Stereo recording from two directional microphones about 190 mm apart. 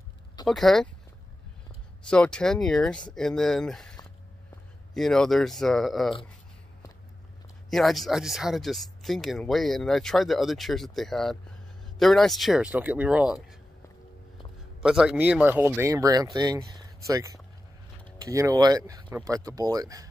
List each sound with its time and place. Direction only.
0.5 s speech: centre (ahead or behind)
2.0 s speech: 5° left (ahead or behind)
4.9 s speech: centre (ahead or behind)
7.7 s speech: centre (ahead or behind)
14.8 s speech: 5° right (ahead or behind)